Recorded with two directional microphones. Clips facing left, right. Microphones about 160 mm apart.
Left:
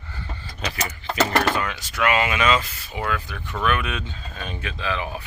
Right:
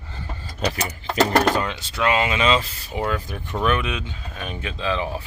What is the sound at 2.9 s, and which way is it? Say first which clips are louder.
Speech: right 3 dB; 40° right (ahead or behind).